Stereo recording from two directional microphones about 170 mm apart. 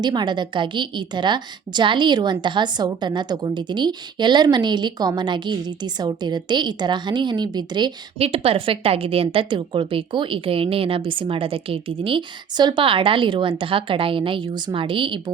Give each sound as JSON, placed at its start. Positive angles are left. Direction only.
{"t": 0.0, "sound": "a woman's voice", "side_deg": -25}